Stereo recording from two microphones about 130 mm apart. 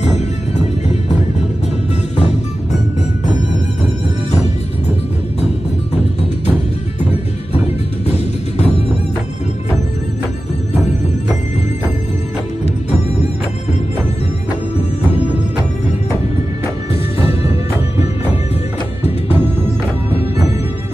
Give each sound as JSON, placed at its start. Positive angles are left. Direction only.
{"t": 8.1, "sound": "music", "side_deg": 55}
{"t": 17.2, "sound": "music", "side_deg": 50}